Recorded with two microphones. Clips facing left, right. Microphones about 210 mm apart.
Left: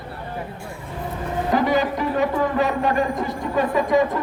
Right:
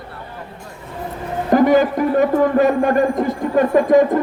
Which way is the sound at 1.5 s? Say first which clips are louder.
Right 8 dB; 50° right (ahead or behind).